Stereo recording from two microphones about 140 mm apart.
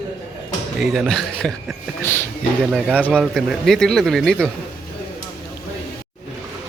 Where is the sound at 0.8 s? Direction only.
Centre (ahead or behind).